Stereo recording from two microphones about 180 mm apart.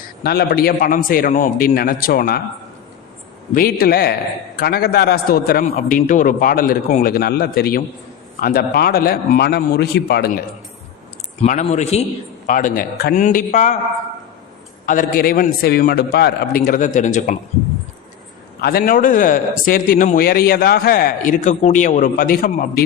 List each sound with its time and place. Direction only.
0.2 s a man's voice: 60° left (ahead or behind)
3.5 s a man's voice: 55° left (ahead or behind)
11.4 s a man's voice: 40° left (ahead or behind)
12.5 s a man's voice: 50° left (ahead or behind)
14.8 s a man's voice: 50° left (ahead or behind)
18.6 s a man's voice: 55° left (ahead or behind)